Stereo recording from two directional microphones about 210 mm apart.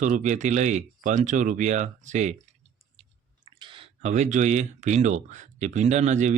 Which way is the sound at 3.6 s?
25° right (ahead or behind).